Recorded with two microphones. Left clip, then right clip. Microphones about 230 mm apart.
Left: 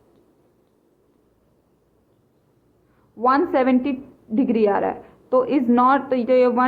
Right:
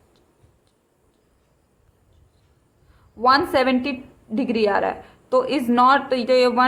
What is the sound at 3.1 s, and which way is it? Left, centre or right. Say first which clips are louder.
A woman's voice: right 1 dB; centre.